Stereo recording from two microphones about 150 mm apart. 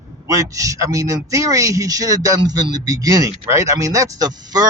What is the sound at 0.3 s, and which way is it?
A man's voice, 20° right (ahead or behind).